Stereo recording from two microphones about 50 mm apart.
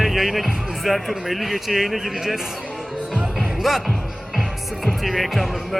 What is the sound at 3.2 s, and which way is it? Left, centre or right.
Music, centre.